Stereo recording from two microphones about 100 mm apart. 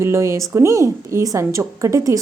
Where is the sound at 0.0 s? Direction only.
25° right (ahead or behind).